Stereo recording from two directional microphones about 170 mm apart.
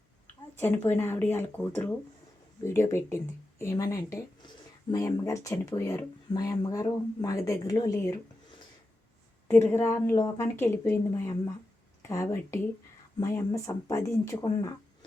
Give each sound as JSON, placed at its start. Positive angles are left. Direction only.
{"t": 0.6, "sound": "a woman's voice", "side_deg": 15}
{"t": 9.5, "sound": "a woman's voice", "side_deg": 10}